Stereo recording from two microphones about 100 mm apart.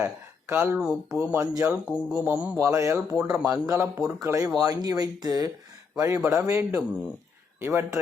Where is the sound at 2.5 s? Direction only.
30° right (ahead or behind).